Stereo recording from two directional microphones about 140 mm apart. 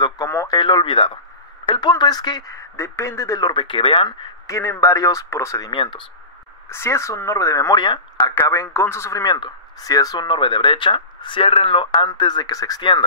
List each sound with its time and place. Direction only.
0.5 s speech: 30° left (ahead or behind)
4.5 s speech: 20° left (ahead or behind)
5.7 s speech: 35° left (ahead or behind)
6.7 s speech: 20° left (ahead or behind)
8.5 s speech: 20° left (ahead or behind)